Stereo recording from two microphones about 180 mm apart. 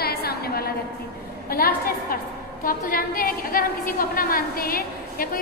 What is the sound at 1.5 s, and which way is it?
A woman's voice, 55° left (ahead or behind).